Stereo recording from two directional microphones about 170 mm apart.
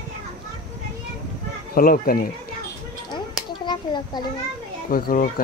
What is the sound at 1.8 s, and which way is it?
Speech, 60° left (ahead or behind).